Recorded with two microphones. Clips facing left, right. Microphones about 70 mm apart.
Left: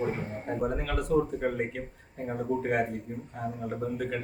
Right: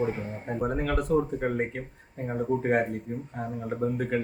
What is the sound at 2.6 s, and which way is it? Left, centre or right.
A man's voice, right.